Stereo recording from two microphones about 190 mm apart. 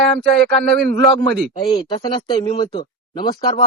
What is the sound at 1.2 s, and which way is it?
Speech, 25° left (ahead or behind).